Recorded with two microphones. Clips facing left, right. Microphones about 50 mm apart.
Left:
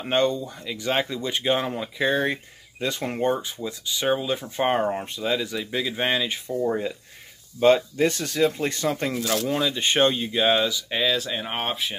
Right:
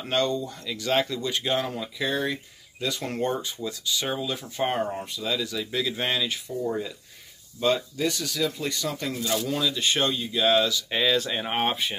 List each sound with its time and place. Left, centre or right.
0.0 s speech: left
6.3 s speech: left
7.6 s speech: left
9.2 s speech: left
9.5 s speech: left
10.9 s speech: centre